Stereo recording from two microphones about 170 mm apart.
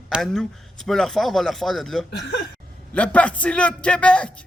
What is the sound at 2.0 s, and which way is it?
Speech, 90° left.